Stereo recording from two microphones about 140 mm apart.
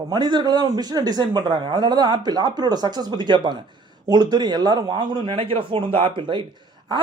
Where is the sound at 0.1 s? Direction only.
30° right (ahead or behind).